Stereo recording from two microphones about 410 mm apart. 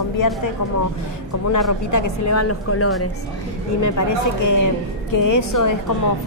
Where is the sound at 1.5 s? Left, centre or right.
Left.